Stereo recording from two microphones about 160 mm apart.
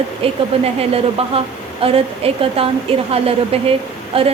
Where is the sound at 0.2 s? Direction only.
40° right (ahead or behind).